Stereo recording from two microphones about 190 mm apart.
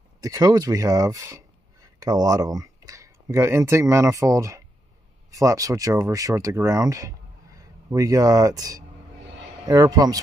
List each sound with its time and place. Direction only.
0.2 s speech: 20° right (ahead or behind)